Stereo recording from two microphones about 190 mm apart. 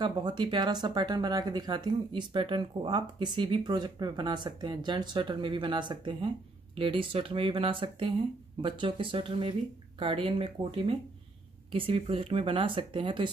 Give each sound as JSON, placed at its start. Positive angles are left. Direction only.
{"t": 0.0, "sound": "speech", "side_deg": -25}